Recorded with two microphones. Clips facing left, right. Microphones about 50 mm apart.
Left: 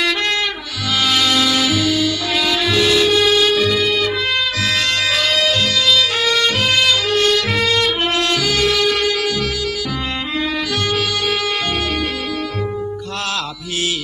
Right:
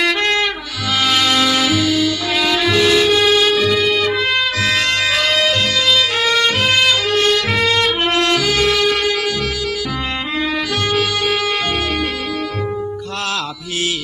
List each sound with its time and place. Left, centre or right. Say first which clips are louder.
1.0 s music: right 1 dB; right